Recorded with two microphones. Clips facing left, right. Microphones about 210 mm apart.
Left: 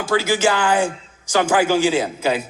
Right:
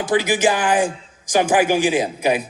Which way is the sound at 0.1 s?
15° right (ahead or behind).